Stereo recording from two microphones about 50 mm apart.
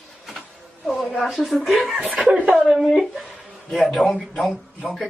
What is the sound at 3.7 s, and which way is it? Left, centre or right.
Speech, centre.